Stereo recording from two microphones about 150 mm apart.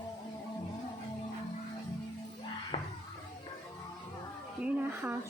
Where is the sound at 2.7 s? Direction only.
40° left (ahead or behind).